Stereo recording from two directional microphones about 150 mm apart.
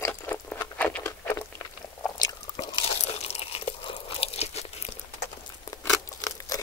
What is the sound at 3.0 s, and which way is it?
Crunch, 45° left (ahead or behind).